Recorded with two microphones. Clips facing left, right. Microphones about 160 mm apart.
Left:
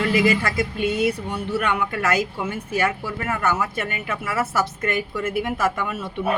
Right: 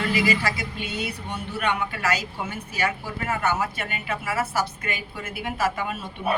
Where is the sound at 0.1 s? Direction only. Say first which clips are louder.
Left 4 dB; 45° left (ahead or behind).